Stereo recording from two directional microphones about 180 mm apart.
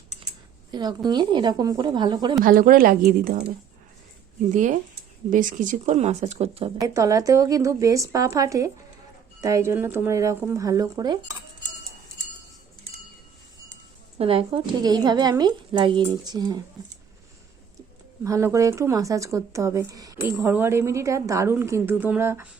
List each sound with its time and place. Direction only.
0.7 s speech: 25° right (ahead or behind)
2.4 s a woman's voice: 50° right (ahead or behind)
4.5 s a woman's voice: 45° right (ahead or behind)
6.7 s speech: 20° right (ahead or behind)
14.2 s speech: 30° right (ahead or behind)
18.2 s speech: 15° right (ahead or behind)